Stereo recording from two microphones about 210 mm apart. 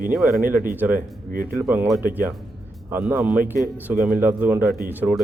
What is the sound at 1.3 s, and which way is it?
Speech, 45° right (ahead or behind).